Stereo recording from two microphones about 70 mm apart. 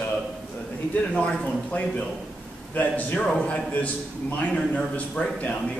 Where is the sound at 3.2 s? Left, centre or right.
Centre.